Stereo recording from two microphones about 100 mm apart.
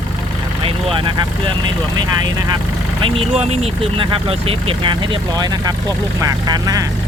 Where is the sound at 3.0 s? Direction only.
65° right (ahead or behind).